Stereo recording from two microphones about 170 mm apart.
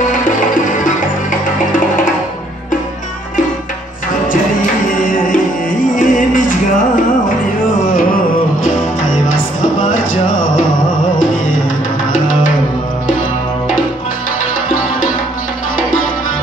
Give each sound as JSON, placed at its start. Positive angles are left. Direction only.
{"t": 0.0, "sound": "music", "side_deg": 50}
{"t": 5.9, "sound": "music", "side_deg": 50}